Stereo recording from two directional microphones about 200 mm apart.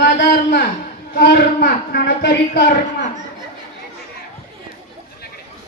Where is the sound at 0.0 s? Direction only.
55° left (ahead or behind).